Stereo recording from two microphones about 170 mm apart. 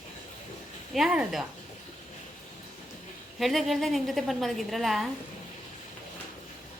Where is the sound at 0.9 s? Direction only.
5° right (ahead or behind).